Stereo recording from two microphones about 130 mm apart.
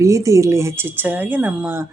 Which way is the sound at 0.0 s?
25° right (ahead or behind).